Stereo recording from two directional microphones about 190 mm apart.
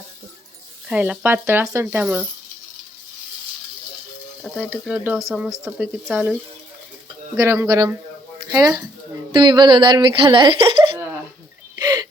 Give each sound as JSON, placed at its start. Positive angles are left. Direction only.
{"t": 0.9, "sound": "speech", "side_deg": -5}
{"t": 4.4, "sound": "speech", "side_deg": -5}
{"t": 7.3, "sound": "a woman's voice", "side_deg": -15}
{"t": 11.8, "sound": "a sound", "side_deg": -20}